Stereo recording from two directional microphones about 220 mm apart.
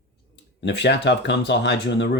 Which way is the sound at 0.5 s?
50° left (ahead or behind).